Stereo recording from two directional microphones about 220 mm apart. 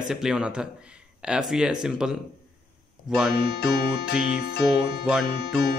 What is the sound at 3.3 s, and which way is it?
Speech, 45° left (ahead or behind).